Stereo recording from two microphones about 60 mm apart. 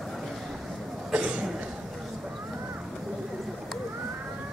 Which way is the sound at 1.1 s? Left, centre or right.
Centre.